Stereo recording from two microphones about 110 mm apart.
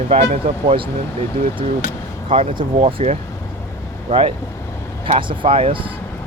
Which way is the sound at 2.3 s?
60° right (ahead or behind).